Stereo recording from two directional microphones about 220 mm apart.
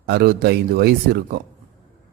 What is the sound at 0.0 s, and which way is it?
Speech, 45° right (ahead or behind).